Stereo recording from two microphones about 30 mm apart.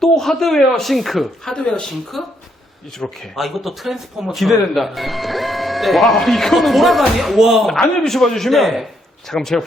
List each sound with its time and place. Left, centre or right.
0.0 s speech: centre
0.9 s speech: centre
1.5 s speech: left
2.1 s speech: centre
3.0 s speech: left
3.3 s speech: centre
7.3 s speech: centre
7.7 s speech: centre
8.4 s speech: centre
9.3 s speech: centre